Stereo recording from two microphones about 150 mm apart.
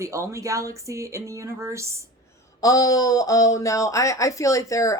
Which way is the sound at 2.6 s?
25° left (ahead or behind).